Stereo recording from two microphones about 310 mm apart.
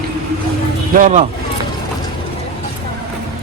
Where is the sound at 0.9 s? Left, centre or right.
Right.